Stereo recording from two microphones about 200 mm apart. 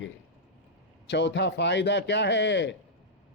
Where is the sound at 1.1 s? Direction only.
60° left (ahead or behind).